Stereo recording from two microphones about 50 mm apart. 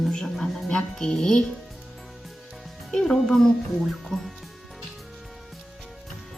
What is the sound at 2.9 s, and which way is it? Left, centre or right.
Speech, centre.